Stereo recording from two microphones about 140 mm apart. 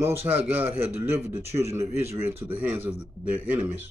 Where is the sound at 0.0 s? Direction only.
45° right (ahead or behind).